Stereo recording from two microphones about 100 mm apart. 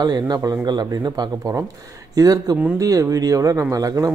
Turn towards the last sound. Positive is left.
turn(degrees=-35)  # may be behind; listen again after turning